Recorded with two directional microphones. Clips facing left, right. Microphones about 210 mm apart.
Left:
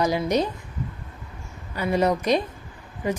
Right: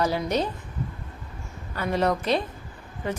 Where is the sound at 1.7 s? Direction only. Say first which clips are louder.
Left 2 dB; 10° left (ahead or behind).